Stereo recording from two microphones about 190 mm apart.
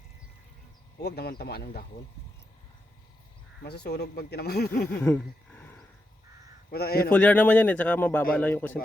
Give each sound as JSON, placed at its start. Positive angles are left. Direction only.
{"t": 1.0, "sound": "speech", "side_deg": 55}
{"t": 3.6, "sound": "speech", "side_deg": 60}
{"t": 5.0, "sound": "a sound", "side_deg": 5}
{"t": 6.7, "sound": "a man's voice", "side_deg": 55}
{"t": 7.1, "sound": "speech", "side_deg": 10}